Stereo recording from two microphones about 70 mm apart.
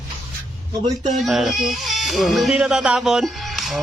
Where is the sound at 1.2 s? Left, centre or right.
Centre.